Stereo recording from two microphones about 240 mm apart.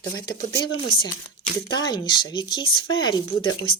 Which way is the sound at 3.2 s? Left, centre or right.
Left.